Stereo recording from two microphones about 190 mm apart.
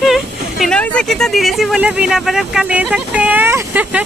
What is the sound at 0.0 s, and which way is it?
Speech, centre (ahead or behind).